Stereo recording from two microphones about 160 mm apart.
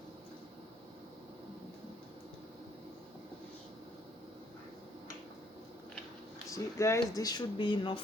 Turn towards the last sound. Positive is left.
turn(degrees=30)  # may be behind; listen again after turning